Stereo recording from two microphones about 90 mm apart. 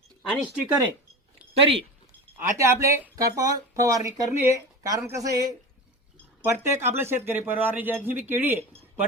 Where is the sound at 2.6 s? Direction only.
35° right (ahead or behind).